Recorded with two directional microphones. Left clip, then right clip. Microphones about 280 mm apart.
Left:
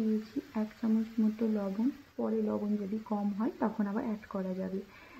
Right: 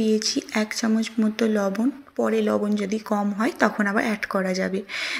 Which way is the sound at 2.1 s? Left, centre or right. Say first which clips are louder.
Right 13 dB; right.